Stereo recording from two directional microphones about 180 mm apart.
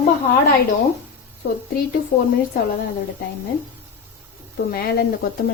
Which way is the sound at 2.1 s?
45° left (ahead or behind).